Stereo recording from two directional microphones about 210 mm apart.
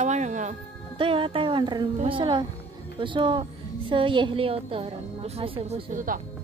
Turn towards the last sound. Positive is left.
turn(degrees=-40)  # may be behind; listen again after turning